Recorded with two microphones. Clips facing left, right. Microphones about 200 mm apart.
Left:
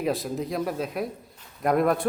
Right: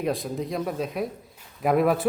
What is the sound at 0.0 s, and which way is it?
A man's voice, centre (ahead or behind).